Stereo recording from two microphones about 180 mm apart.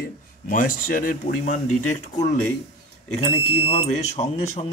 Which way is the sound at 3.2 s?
30° left (ahead or behind).